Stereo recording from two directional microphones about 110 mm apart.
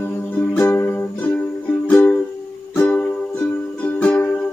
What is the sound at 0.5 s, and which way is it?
Music, 20° left (ahead or behind).